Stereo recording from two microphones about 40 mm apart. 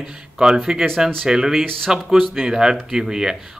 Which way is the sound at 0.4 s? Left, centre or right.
Right.